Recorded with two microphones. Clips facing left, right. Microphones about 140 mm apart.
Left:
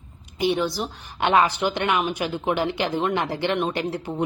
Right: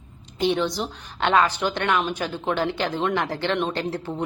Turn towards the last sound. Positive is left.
turn(degrees=15)  # may be behind; listen again after turning